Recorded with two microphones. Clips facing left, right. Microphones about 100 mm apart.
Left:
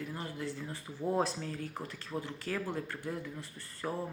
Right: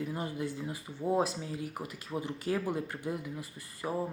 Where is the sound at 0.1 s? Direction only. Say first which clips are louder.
Right 4 dB; 15° right (ahead or behind).